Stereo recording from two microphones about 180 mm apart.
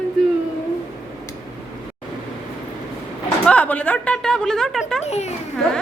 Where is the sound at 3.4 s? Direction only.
10° left (ahead or behind).